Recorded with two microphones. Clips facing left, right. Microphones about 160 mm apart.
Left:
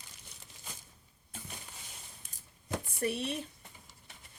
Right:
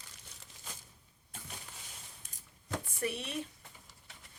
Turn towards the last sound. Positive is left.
turn(degrees=30)  # may be behind; listen again after turning